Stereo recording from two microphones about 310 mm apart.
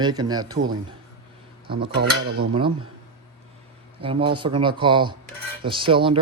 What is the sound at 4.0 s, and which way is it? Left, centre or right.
Speech, centre.